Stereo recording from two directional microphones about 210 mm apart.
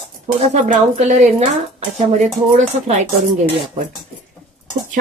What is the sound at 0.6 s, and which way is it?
A woman's voice, 35° right (ahead or behind).